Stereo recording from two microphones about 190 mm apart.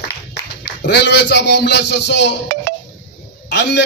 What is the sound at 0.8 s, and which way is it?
Speech, 60° left (ahead or behind).